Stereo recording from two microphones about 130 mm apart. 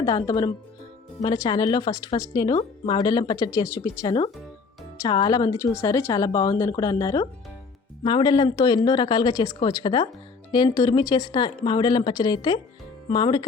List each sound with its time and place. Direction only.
0.0 s a woman's voice: 30° left (ahead or behind)
9.6 s speech: 40° left (ahead or behind)